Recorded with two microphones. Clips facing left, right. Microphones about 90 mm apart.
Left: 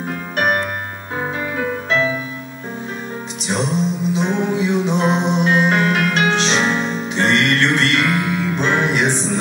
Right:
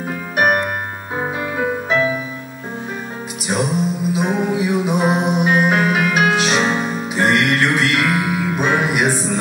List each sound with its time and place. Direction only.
0.4 s music: 10° right (ahead or behind)
3.4 s music: 10° right (ahead or behind)